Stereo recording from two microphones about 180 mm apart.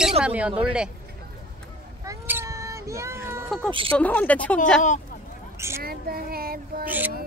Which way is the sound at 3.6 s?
30° right (ahead or behind).